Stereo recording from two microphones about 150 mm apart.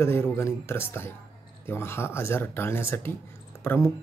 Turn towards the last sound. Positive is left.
turn(degrees=15)  # may be behind; listen again after turning